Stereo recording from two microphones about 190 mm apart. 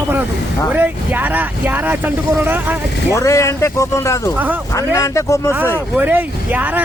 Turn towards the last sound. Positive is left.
turn(degrees=-10)  # may be behind; listen again after turning